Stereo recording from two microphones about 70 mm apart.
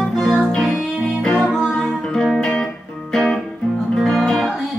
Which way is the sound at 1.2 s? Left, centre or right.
Centre.